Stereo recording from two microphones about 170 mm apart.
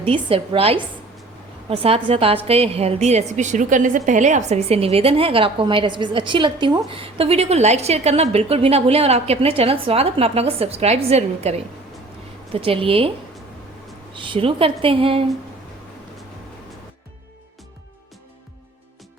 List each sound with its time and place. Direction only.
0.0 s a woman's voice: 35° right (ahead or behind)